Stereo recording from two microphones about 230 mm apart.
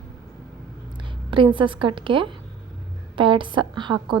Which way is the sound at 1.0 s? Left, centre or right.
Right.